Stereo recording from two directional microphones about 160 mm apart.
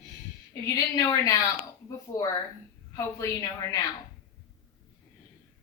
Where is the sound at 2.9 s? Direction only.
20° left (ahead or behind).